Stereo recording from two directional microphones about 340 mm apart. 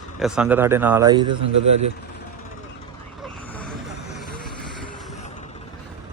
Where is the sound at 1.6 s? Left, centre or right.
Right.